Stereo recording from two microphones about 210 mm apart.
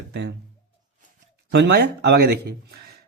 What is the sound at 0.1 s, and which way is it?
Speech, 55° right (ahead or behind).